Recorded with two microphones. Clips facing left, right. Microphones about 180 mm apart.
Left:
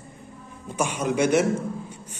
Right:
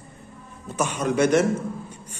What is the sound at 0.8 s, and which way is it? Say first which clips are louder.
Speech: right 2 dB; 10° left (ahead or behind).